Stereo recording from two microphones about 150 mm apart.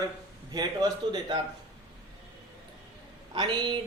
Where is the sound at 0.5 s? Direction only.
25° right (ahead or behind).